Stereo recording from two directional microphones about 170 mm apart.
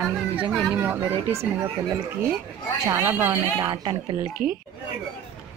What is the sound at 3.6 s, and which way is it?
Speech, 30° right (ahead or behind).